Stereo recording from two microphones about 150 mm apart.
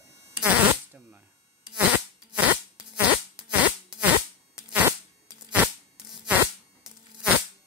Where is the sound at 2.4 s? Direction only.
10° right (ahead or behind).